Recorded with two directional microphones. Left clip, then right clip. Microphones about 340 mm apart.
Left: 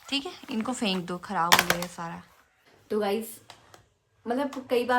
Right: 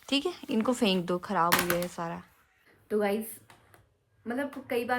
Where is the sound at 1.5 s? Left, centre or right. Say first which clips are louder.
Left 9 dB; centre.